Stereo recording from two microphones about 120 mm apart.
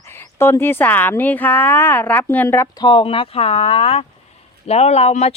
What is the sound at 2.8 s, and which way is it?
Speech, 45° left (ahead or behind).